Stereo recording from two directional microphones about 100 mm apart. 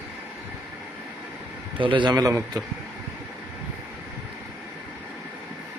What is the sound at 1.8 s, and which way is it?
Speech, 55° right (ahead or behind).